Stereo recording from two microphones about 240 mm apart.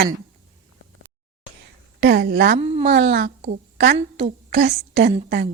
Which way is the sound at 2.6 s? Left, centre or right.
Right.